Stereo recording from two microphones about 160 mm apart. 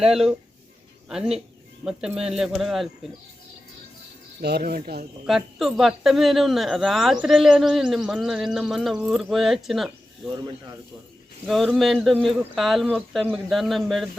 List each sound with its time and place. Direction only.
0.1 s speech: 5° right (ahead or behind)
4.4 s speech: 80° right
5.2 s speech: centre (ahead or behind)
11.4 s speech: centre (ahead or behind)